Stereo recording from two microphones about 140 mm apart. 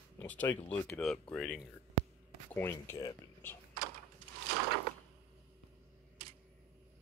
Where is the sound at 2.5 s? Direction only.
15° left (ahead or behind).